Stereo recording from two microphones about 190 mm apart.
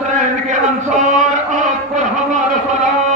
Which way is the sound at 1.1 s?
40° right (ahead or behind).